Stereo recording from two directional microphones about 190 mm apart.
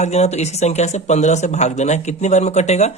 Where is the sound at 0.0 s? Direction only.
35° left (ahead or behind).